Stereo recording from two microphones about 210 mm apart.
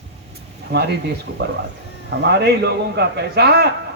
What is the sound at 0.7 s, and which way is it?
A man's voice, 55° right (ahead or behind).